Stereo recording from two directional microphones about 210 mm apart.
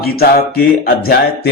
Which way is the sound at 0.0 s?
45° left (ahead or behind).